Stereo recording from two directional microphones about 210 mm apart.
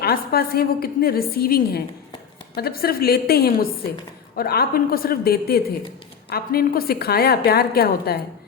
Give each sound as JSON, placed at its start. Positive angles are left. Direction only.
{"t": 0.0, "sound": "a woman's voice", "side_deg": 45}